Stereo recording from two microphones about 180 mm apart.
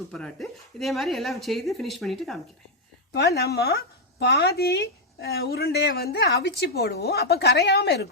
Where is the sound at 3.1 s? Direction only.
65° left (ahead or behind).